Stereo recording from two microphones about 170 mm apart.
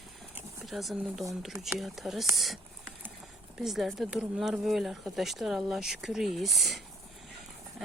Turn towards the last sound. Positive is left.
turn(degrees=0)  # may be behind; listen again after turning